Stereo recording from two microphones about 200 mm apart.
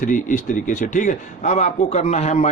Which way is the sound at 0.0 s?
40° left (ahead or behind).